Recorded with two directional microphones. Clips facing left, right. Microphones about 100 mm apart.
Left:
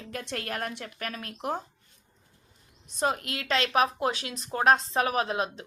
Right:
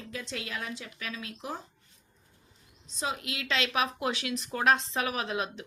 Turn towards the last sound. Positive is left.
turn(degrees=35)  # may be behind; listen again after turning